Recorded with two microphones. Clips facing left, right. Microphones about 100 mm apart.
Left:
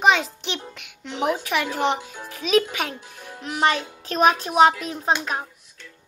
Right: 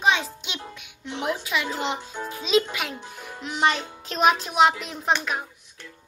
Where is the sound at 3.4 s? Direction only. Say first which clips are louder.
Left 2 dB; 45° left (ahead or behind).